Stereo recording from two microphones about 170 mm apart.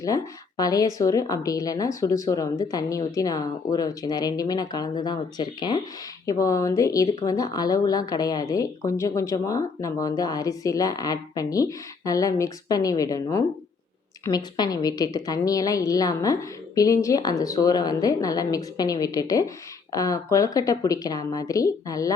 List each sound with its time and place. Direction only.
0.0 s speech: 20° left (ahead or behind)